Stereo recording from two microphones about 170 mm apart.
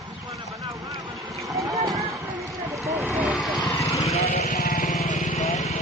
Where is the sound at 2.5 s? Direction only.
Centre (ahead or behind).